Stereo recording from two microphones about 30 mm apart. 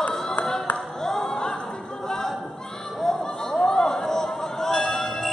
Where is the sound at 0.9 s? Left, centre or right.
Centre.